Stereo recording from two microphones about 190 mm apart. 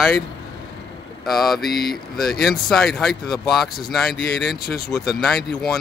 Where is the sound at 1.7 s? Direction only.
55° left (ahead or behind).